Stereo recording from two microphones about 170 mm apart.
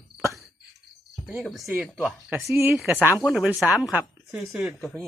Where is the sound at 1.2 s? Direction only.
Centre (ahead or behind).